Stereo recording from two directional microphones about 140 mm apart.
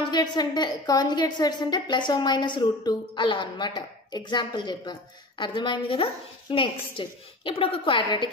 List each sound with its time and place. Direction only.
0.1 s a woman's voice: 30° left (ahead or behind)